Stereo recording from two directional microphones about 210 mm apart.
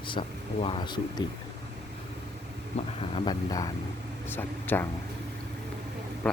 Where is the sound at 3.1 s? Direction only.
20° left (ahead or behind).